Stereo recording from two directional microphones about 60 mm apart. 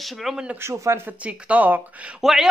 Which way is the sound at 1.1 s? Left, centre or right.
Right.